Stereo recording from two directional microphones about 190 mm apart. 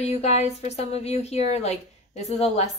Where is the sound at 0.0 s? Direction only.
35° left (ahead or behind).